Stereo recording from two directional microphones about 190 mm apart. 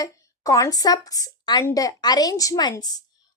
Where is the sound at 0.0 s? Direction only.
15° left (ahead or behind).